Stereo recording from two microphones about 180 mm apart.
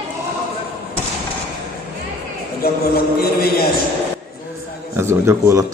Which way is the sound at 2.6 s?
60° left (ahead or behind).